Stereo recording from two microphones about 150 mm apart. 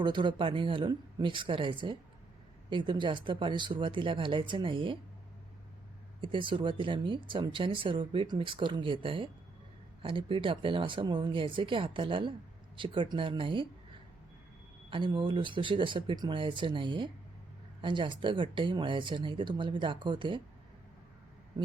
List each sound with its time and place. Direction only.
0.0 s speech: 30° right (ahead or behind)
6.2 s speech: 35° right (ahead or behind)
14.8 s speech: 35° right (ahead or behind)